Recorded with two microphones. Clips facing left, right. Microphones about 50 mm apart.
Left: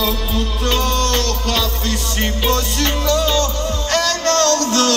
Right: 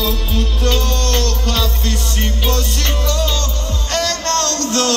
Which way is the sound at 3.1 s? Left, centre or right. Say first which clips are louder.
Left 4 dB; left.